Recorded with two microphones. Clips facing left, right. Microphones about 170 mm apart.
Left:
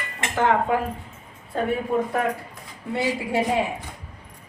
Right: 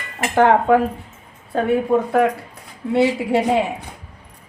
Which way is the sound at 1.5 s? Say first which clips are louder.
Right 6 dB; 75° right (ahead or behind).